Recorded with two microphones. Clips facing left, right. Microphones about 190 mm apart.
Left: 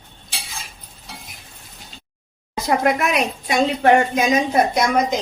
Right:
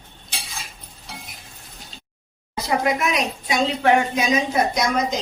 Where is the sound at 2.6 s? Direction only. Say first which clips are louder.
Left 3 dB; 55° left (ahead or behind).